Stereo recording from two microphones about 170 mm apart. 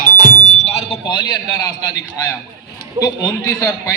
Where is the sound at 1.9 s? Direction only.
20° left (ahead or behind).